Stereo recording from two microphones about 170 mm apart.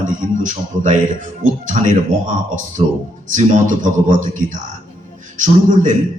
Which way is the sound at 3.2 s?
50° right (ahead or behind).